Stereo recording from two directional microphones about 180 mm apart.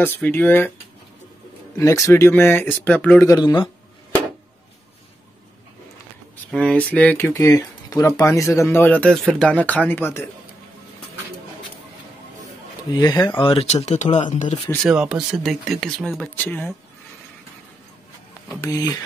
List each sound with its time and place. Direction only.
0.0 s speech: 10° left (ahead or behind)
1.8 s speech: 15° left (ahead or behind)
3.3 s speech: 25° left (ahead or behind)
6.5 s speech: 5° left (ahead or behind)
12.9 s speech: 20° left (ahead or behind); by 14.6 s 40° left (ahead or behind)
14.9 s speech: 5° right (ahead or behind)
18.6 s speech: 20° left (ahead or behind)